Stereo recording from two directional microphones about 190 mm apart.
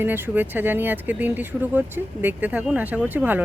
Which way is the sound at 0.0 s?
10° right (ahead or behind).